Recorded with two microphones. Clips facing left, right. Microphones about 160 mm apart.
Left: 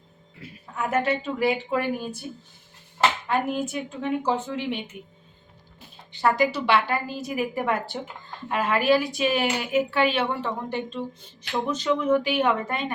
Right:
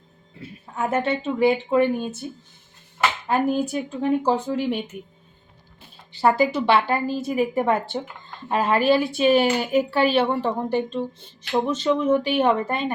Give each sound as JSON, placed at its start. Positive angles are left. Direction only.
{"t": 0.8, "sound": "a woman's voice", "side_deg": -30}
{"t": 3.2, "sound": "a woman's voice", "side_deg": -35}
{"t": 6.1, "sound": "a woman's voice", "side_deg": -30}